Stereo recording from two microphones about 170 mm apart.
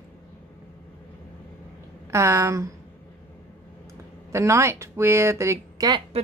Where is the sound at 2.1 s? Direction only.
15° right (ahead or behind).